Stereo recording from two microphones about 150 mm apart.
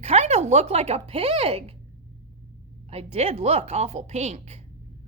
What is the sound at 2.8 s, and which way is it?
Speech, 45° right (ahead or behind).